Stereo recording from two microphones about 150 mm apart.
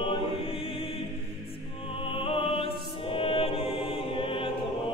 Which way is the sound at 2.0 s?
40° left (ahead or behind).